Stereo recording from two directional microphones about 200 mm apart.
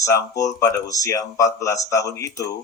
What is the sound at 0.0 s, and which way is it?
A man's voice, 15° left (ahead or behind).